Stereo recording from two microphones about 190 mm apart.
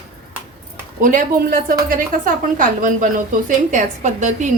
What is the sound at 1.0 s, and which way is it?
A woman's voice, 45° right (ahead or behind).